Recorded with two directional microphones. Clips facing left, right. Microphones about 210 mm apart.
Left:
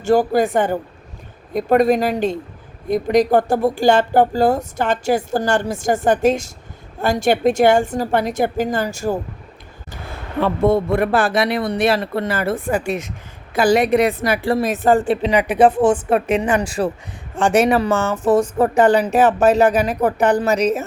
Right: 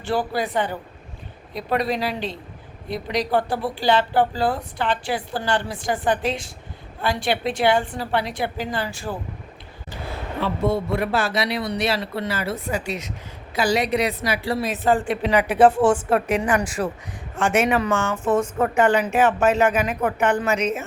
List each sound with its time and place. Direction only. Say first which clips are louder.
0.0 s speech: left 9 dB; 45° left (ahead or behind)
10.4 s speech: left 6 dB; 50° left (ahead or behind)
15.1 s speech: left 3 dB; 20° left (ahead or behind); by 20.8 s 35° left (ahead or behind)